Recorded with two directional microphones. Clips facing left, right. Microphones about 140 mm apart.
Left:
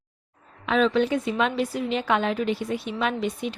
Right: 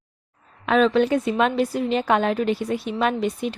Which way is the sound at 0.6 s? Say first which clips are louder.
Right 3 dB; 50° right (ahead or behind).